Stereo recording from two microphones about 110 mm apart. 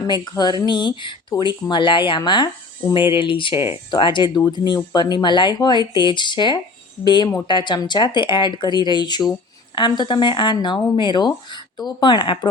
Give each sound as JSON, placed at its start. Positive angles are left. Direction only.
{"t": 0.0, "sound": "speech", "side_deg": 40}